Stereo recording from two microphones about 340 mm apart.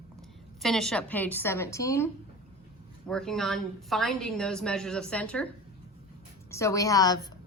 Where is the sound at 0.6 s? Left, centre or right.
Centre.